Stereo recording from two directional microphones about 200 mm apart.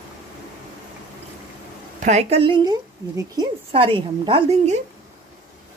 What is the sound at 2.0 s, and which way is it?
A woman's voice, 35° right (ahead or behind).